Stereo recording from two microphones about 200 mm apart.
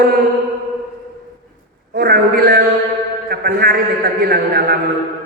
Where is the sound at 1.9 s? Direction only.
50° right (ahead or behind).